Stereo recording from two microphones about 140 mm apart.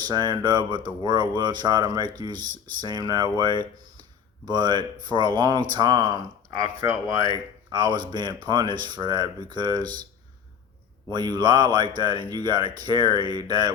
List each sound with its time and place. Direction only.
0.0 s speech: 30° right (ahead or behind)
11.1 s speech: 30° right (ahead or behind)